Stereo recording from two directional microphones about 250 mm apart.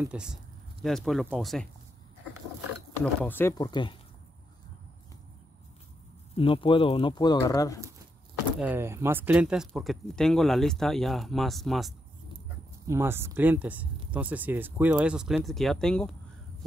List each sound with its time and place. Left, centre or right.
0.1 s speech: centre
3.0 s speech: centre
6.3 s speech: left
8.5 s speech: centre
12.8 s speech: centre